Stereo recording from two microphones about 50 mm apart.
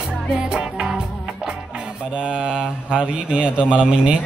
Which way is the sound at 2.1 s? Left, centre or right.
Centre.